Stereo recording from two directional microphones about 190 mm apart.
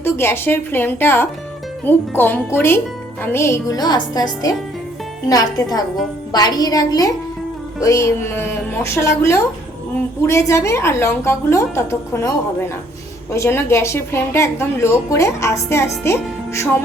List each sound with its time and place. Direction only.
0.0 s a woman's voice: 10° left (ahead or behind)